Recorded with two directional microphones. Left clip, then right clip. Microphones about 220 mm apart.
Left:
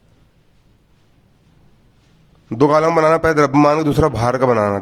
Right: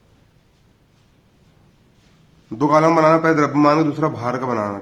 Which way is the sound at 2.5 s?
40° left (ahead or behind).